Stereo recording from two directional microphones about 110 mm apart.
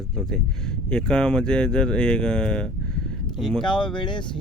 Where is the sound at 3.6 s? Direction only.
45° left (ahead or behind).